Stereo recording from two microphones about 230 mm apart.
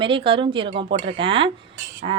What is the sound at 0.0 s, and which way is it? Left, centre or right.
A woman's voice, right.